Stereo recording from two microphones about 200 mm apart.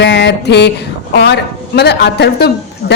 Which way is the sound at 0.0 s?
60° left (ahead or behind).